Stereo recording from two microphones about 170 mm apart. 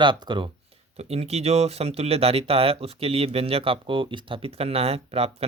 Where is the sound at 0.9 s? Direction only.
35° right (ahead or behind).